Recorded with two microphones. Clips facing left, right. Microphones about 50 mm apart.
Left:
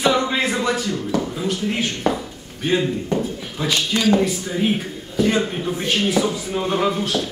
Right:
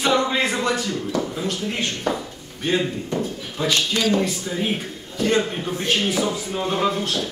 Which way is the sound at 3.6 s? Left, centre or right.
Centre.